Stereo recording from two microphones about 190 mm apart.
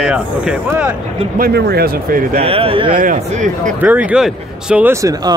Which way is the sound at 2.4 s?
30° right (ahead or behind).